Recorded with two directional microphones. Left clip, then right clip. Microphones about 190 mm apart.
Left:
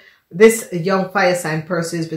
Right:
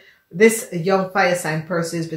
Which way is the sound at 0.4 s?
35° left (ahead or behind).